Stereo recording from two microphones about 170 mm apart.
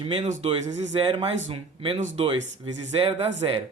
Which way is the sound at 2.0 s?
45° right (ahead or behind).